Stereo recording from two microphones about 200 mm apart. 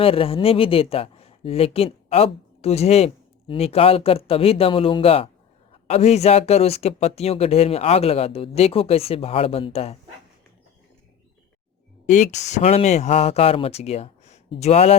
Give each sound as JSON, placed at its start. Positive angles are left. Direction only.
{"t": 0.0, "sound": "speech", "side_deg": 30}
{"t": 12.0, "sound": "speech", "side_deg": 35}